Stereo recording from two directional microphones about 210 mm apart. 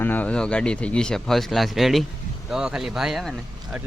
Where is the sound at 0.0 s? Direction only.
10° left (ahead or behind).